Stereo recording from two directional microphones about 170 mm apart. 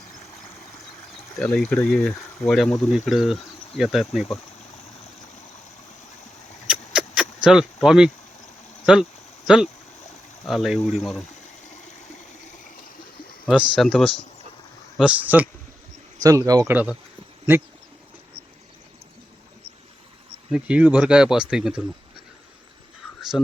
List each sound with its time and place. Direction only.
1.4 s speech: 5° left (ahead or behind)
6.7 s a sound: 5° right (ahead or behind)
8.9 s speech: 5° right (ahead or behind)
10.4 s speech: centre (ahead or behind)
13.5 s speech: centre (ahead or behind)
16.2 s speech: 20° right (ahead or behind)
16.7 s speech: 10° right (ahead or behind)
20.5 s speech: 5° right (ahead or behind)
23.3 s speech: centre (ahead or behind)